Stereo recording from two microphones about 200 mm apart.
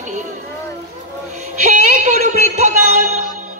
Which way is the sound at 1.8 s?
35° right (ahead or behind).